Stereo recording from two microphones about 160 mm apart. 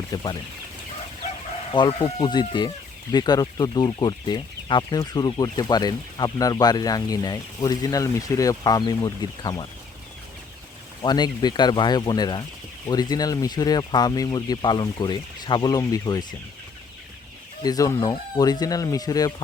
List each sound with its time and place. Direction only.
0.1 s speech: 25° left (ahead or behind)
1.7 s speech: 30° left (ahead or behind)
11.0 s speech: 25° left (ahead or behind)
17.6 s speech: 25° left (ahead or behind)